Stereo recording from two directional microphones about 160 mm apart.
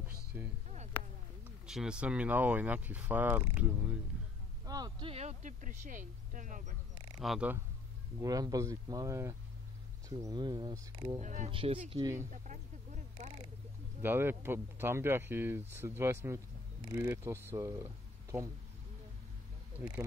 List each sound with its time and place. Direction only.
0.0 s a sound: 10° right (ahead or behind)
1.7 s speech: 5° right (ahead or behind)
4.6 s speech: 25° right (ahead or behind); by 6.7 s 55° right (ahead or behind)
7.2 s speech: 5° right (ahead or behind)
8.2 s speech: 20° right (ahead or behind)
11.1 s speech: 45° right (ahead or behind)
11.5 s speech: 35° right (ahead or behind)
12.0 s speech: 20° right (ahead or behind)
12.4 s a sound: 50° right (ahead or behind)
14.0 s speech: 15° right (ahead or behind)